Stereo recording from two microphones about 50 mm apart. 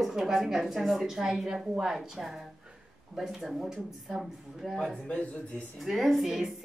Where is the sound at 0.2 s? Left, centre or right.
Centre.